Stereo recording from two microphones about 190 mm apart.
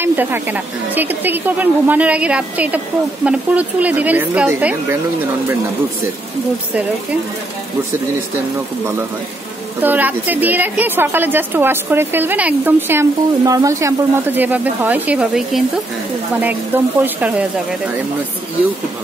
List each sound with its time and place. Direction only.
0.0 s a woman's voice: 10° right (ahead or behind)
9.8 s a woman's voice: 10° right (ahead or behind)